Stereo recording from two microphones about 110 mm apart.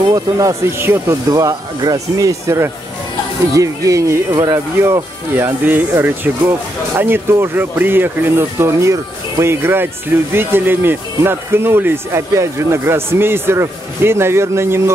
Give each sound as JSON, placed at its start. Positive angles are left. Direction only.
{"t": 0.0, "sound": "speech", "side_deg": -30}